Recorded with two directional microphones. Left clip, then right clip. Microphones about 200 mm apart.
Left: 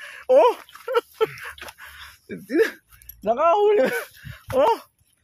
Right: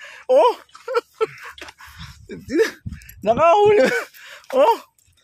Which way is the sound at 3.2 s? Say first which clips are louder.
Right 4 dB; 30° right (ahead or behind).